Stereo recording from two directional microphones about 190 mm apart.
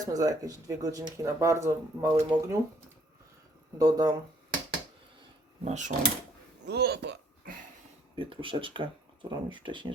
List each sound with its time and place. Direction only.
0.0 s speech: 20° right (ahead or behind)
3.8 s speech: 20° right (ahead or behind)
5.6 s speech: 40° right (ahead or behind)
6.7 s speech: 60° right (ahead or behind)
8.1 s speech: 25° right (ahead or behind)